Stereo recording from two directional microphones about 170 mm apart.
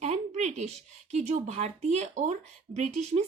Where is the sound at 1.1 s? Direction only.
40° right (ahead or behind).